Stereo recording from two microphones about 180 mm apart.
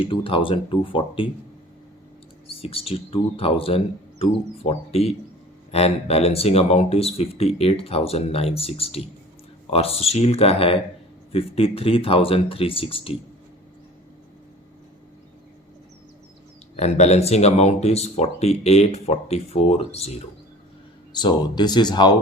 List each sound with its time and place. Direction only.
0.0 s speech: 30° left (ahead or behind)
2.6 s speech: 30° left (ahead or behind)
16.7 s speech: 40° left (ahead or behind)
21.1 s speech: 25° left (ahead or behind)